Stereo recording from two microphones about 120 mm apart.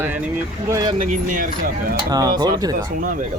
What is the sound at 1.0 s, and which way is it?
Speech, 90° right.